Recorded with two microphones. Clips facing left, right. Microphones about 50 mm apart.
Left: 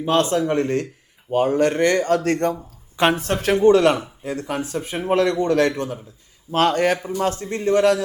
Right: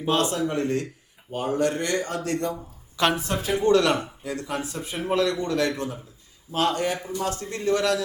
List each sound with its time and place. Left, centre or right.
0.1 s speech: left
2.9 s a sound: left
3.2 s speech: left
3.6 s speech: left
4.7 s speech: left
7.0 s speech: left